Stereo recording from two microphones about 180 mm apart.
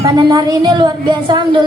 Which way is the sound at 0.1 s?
25° right (ahead or behind).